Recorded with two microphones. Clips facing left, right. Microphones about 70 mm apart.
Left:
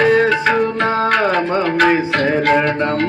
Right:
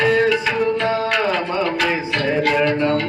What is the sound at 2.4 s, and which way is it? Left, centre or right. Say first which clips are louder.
Music: left 2 dB; left.